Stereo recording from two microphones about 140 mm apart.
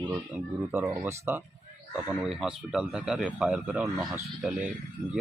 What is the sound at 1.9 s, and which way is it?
Speech, 5° right (ahead or behind).